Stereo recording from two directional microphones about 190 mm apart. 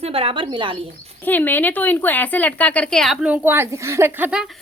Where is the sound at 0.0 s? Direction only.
30° right (ahead or behind).